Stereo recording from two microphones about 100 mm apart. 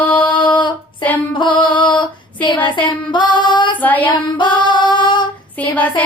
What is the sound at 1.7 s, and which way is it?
Music, 50° left (ahead or behind).